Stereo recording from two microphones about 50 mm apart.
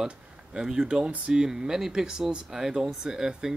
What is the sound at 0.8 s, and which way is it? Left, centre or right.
Speech, right.